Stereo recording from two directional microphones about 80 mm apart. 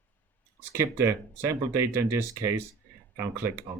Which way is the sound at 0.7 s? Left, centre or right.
Right.